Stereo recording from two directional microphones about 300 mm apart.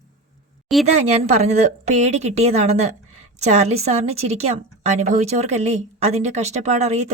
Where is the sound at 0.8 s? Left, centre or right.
Right.